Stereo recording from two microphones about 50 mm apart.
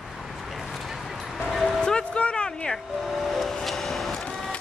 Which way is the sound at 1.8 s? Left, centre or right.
Centre.